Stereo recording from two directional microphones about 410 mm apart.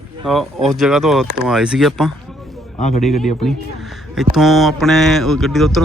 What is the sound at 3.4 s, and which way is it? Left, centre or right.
Speech, centre.